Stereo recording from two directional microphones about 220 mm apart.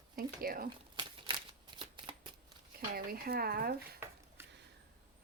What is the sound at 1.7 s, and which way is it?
Shuffling cards, 25° right (ahead or behind).